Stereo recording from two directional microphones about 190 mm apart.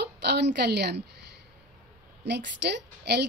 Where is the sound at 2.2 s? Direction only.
65° right (ahead or behind).